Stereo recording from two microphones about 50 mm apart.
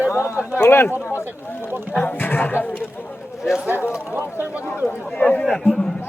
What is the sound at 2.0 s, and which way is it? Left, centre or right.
Speech, left.